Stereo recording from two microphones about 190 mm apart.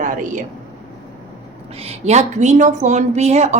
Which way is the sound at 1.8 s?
35° right (ahead or behind).